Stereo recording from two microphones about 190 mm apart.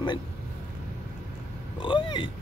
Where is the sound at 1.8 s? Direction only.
25° left (ahead or behind).